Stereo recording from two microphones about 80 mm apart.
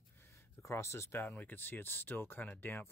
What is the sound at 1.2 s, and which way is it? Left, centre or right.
Speech, left.